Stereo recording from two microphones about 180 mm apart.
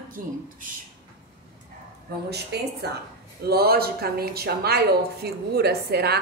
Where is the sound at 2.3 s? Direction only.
65° right (ahead or behind).